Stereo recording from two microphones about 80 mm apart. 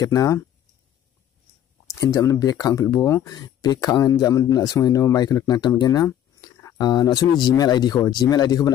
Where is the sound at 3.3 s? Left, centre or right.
Left.